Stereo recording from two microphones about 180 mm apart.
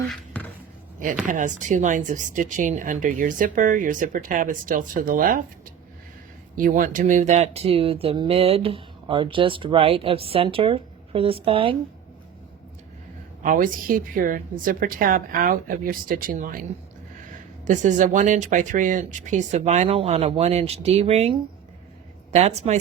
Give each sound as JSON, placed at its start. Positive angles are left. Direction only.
{"t": 0.1, "sound": "music", "side_deg": 10}
{"t": 1.3, "sound": "speech", "side_deg": -45}
{"t": 6.6, "sound": "speech", "side_deg": -50}
{"t": 13.4, "sound": "speech", "side_deg": -50}
{"t": 17.7, "sound": "speech", "side_deg": -45}
{"t": 22.4, "sound": "speech", "side_deg": -35}